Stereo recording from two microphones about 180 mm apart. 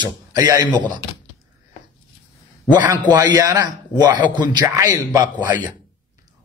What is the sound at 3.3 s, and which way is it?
Speech, 20° right (ahead or behind).